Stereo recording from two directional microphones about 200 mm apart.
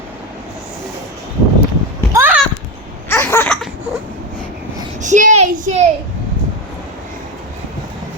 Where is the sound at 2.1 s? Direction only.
10° right (ahead or behind).